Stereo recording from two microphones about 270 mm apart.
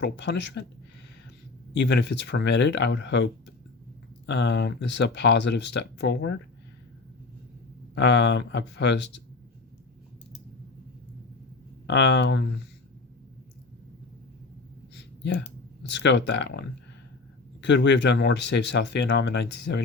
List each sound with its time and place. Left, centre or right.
0.0 s speech: left
1.7 s speech: left
7.9 s speech: left
11.9 s speech: left
14.9 s a sound: left
15.8 s speech: left